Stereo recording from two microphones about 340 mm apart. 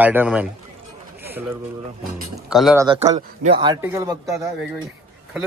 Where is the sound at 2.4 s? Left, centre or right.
Centre.